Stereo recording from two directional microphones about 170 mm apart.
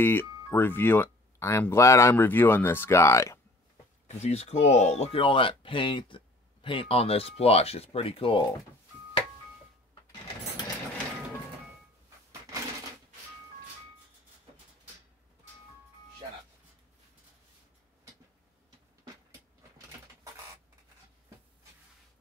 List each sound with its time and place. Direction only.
0.0 s speech: 10° left (ahead or behind)
4.1 s speech: 40° left (ahead or behind)